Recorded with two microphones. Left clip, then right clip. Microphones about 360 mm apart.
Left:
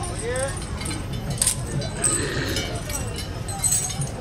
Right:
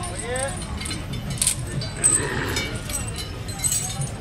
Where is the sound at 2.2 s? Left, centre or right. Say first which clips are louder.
Even; centre.